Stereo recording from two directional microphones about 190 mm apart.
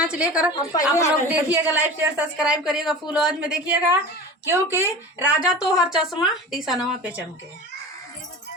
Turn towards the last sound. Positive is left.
turn(degrees=-5)  # may be behind; listen again after turning